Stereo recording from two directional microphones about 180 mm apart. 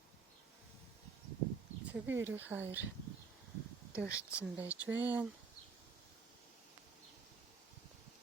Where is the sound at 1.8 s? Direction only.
10° right (ahead or behind).